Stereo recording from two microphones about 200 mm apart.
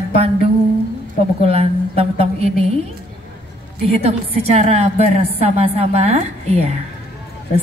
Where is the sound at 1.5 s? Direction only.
30° right (ahead or behind).